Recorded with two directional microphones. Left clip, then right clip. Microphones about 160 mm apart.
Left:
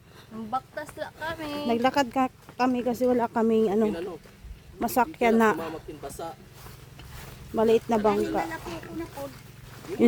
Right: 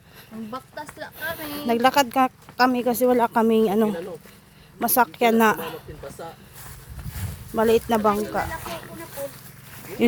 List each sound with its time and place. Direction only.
0.9 s a woman's voice: centre (ahead or behind)
7.5 s a woman's voice: 10° left (ahead or behind)
9.2 s speech: 80° right